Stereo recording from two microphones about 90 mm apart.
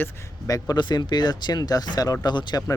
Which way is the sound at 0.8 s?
55° left (ahead or behind).